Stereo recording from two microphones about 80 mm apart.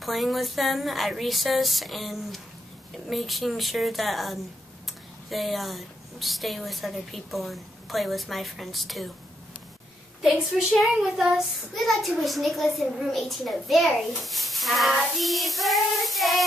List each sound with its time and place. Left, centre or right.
0.0 s a woman's voice: centre
10.2 s a woman's voice: centre
15.1 s child singing: centre